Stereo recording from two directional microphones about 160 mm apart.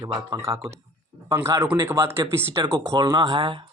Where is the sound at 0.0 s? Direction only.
20° right (ahead or behind).